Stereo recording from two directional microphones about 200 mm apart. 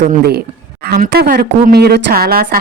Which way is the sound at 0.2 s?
50° right (ahead or behind).